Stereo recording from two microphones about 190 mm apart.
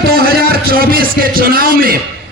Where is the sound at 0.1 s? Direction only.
55° right (ahead or behind).